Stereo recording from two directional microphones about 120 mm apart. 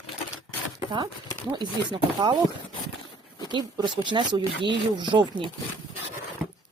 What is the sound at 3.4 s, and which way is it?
Speech, 40° right (ahead or behind).